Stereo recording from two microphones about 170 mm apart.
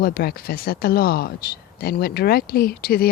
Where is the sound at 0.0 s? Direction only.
65° left (ahead or behind).